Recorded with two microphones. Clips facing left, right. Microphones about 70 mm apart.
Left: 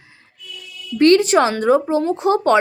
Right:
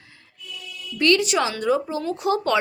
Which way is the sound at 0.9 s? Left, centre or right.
Left.